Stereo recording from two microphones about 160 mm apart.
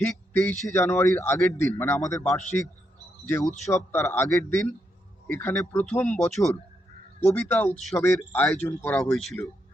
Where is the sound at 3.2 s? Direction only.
15° left (ahead or behind).